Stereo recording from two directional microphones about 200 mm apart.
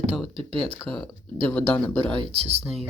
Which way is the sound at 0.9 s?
Centre (ahead or behind).